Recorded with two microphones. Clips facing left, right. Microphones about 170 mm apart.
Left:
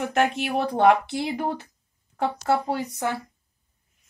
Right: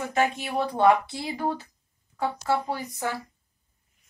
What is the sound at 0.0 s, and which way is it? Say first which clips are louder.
Speech: left 2 dB; 70° left (ahead or behind).